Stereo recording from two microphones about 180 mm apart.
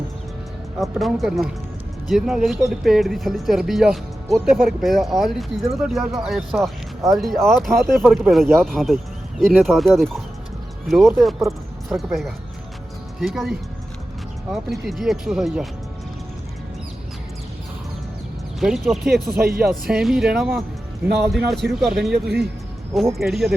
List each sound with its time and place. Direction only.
0.8 s speech: centre (ahead or behind)
14.8 s speech: centre (ahead or behind)
18.6 s speech: centre (ahead or behind)
22.1 s speech: 65° right (ahead or behind)
23.1 s speech: centre (ahead or behind)